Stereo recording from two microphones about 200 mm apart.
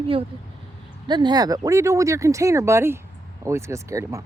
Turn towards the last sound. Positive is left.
turn(degrees=-15)  # may be behind; listen again after turning